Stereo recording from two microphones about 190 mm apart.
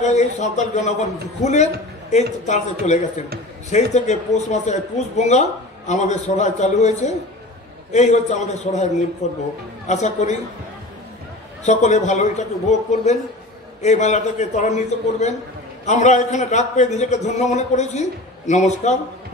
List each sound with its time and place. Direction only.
0.0 s speech: 35° left (ahead or behind)
11.6 s speech: 35° left (ahead or behind)